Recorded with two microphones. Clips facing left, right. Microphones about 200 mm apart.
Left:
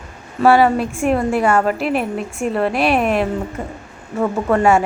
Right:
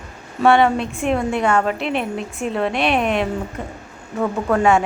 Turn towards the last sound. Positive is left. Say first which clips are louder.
# left 2 dB
turn(degrees=0)  # may be behind; listen again after turning